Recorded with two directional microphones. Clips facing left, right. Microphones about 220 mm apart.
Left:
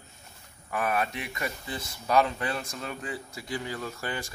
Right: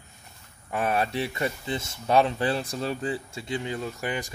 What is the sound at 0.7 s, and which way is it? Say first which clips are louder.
Speech: right 3 dB; 30° right (ahead or behind).